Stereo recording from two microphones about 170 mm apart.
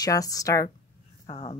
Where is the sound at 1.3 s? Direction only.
35° left (ahead or behind).